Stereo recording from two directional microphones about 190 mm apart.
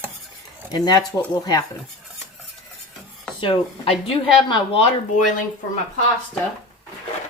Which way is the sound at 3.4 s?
30° left (ahead or behind).